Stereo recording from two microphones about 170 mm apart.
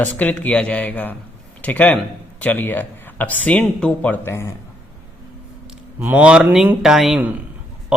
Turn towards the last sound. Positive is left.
turn(degrees=-5)  # may be behind; listen again after turning